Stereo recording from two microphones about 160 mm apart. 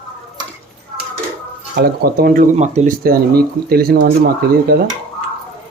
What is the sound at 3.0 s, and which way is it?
Speech, 75° right (ahead or behind).